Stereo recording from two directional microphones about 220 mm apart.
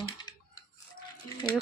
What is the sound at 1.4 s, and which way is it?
Speech, 20° left (ahead or behind).